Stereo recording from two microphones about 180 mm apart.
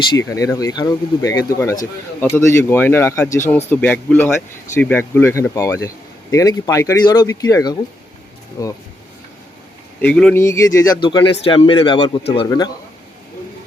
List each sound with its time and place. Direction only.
0.1 s speech: 20° left (ahead or behind)
10.0 s speech: 5° left (ahead or behind)